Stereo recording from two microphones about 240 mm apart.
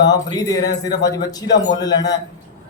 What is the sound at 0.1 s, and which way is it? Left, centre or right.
A man's voice, centre.